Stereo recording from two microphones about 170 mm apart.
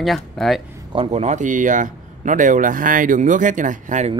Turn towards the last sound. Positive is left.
turn(degrees=-45)  # may be behind; listen again after turning